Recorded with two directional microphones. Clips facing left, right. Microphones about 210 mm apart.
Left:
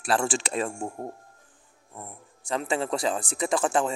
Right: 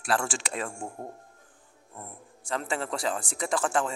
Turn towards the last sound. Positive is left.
turn(degrees=20)  # may be behind; listen again after turning